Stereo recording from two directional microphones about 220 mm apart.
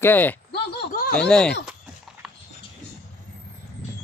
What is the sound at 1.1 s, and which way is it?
Speech, 5° left (ahead or behind).